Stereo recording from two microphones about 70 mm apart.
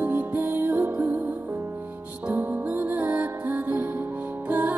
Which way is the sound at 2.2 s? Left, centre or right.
Right.